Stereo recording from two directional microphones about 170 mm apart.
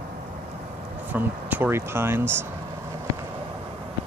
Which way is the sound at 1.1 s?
10° right (ahead or behind).